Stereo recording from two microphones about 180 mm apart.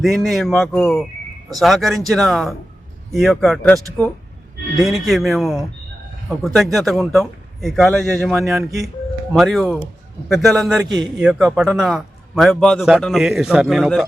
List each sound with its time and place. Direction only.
0.0 s a man's voice: centre (ahead or behind)
5.0 s a man's voice: centre (ahead or behind)
10.8 s a man's voice: 25° right (ahead or behind)
11.2 s a man's voice: centre (ahead or behind)